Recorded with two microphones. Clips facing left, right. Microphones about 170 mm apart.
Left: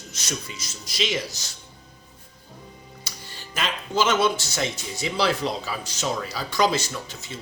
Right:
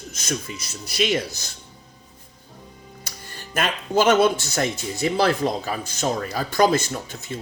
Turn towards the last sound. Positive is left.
turn(degrees=-50)  # may be behind; listen again after turning